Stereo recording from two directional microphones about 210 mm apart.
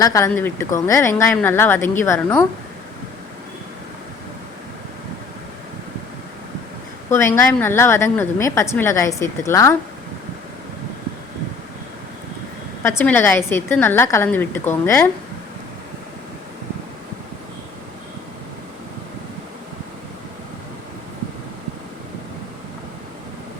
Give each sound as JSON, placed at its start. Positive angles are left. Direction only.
{"t": 0.0, "sound": "a woman's voice", "side_deg": 15}
{"t": 7.1, "sound": "a woman's voice", "side_deg": 10}
{"t": 12.8, "sound": "a woman's voice", "side_deg": 10}